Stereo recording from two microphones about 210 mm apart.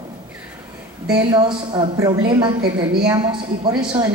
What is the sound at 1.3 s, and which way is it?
A woman's voice, 20° right (ahead or behind).